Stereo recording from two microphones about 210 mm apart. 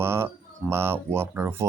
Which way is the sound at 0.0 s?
10° right (ahead or behind).